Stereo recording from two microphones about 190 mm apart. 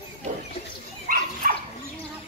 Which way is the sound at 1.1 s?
45° right (ahead or behind).